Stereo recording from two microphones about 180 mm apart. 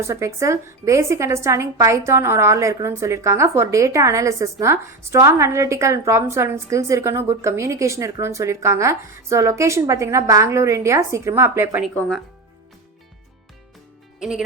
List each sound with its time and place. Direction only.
0.0 s a woman's voice: 15° right (ahead or behind)
11.9 s speech: centre (ahead or behind)
14.2 s speech: 5° right (ahead or behind)